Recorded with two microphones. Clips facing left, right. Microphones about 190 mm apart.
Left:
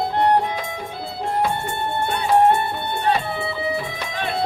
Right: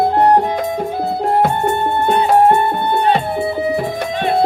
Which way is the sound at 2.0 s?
45° right (ahead or behind).